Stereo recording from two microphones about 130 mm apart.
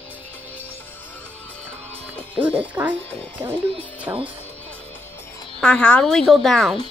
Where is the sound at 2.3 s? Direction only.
10° right (ahead or behind).